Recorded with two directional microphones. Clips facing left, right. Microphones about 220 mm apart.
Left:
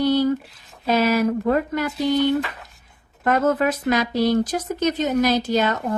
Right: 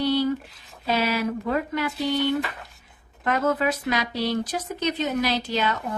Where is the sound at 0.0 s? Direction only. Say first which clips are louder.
Left 4 dB; 45° left (ahead or behind).